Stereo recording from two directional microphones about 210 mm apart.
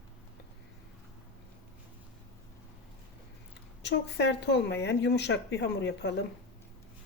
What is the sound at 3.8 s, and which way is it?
A woman's voice, 55° left (ahead or behind).